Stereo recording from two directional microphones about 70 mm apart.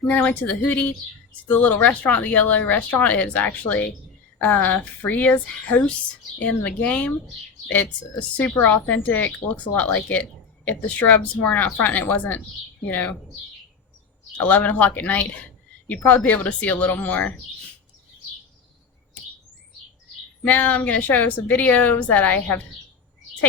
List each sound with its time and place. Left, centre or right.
0.1 s speech: left
8.4 s speech: left
14.3 s speech: left
20.4 s speech: left